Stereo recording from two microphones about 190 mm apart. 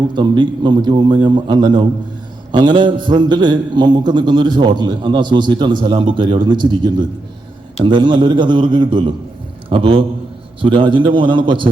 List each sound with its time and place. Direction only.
0.1 s a man's voice: 25° right (ahead or behind)